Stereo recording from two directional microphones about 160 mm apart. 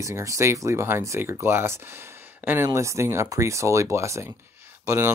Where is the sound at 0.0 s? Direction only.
20° right (ahead or behind).